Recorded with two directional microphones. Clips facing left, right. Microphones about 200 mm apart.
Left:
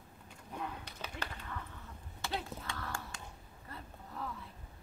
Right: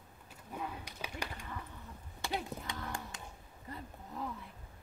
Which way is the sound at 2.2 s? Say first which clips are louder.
Right 2 dB; 15° right (ahead or behind).